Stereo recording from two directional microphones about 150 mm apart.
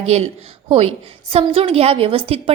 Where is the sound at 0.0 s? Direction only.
45° right (ahead or behind).